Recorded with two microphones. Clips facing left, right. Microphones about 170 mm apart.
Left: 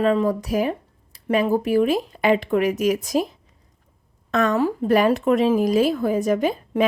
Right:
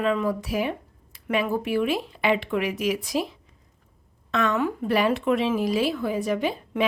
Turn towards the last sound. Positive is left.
turn(degrees=45)  # may be behind; listen again after turning